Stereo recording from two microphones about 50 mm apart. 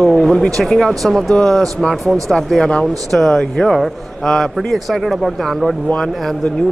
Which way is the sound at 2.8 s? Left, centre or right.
Centre.